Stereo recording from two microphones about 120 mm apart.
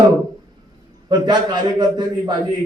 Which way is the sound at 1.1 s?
35° right (ahead or behind).